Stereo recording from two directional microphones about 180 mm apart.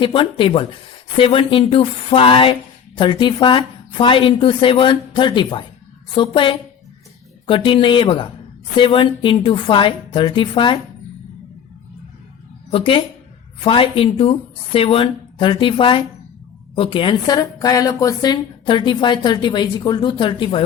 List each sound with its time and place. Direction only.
0.0 s a woman's voice: 30° left (ahead or behind)
12.7 s a woman's voice: 30° left (ahead or behind)